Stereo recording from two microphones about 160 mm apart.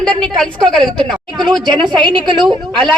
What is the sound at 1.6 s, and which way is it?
Speech, 30° right (ahead or behind).